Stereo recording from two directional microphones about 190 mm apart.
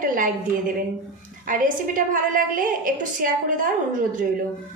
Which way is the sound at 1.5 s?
45° right (ahead or behind).